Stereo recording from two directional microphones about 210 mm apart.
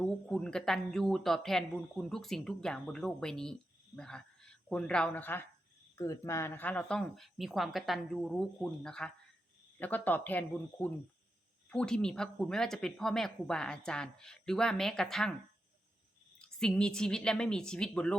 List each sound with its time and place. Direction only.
0.0 s speech: 5° left (ahead or behind)
16.4 s speech: 5° left (ahead or behind)